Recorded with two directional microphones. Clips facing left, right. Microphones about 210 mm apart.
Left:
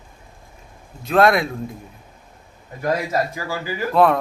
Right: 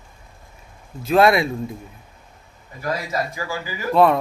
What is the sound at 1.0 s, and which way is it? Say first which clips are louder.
Speech: even; centre (ahead or behind).